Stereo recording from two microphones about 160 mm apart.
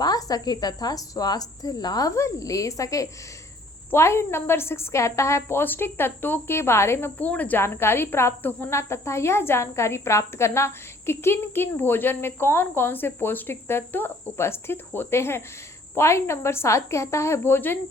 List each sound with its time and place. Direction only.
0.0 s a woman's voice: 25° left (ahead or behind)